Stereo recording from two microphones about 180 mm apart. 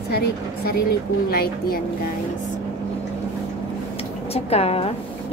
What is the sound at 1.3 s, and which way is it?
Speech, 55° left (ahead or behind).